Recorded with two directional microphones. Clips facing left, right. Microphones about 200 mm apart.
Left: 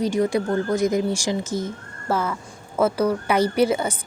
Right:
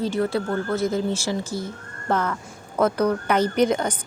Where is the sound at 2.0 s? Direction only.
5° left (ahead or behind).